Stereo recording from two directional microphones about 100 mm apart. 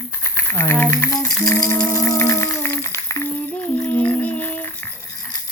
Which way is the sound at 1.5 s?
20° left (ahead or behind).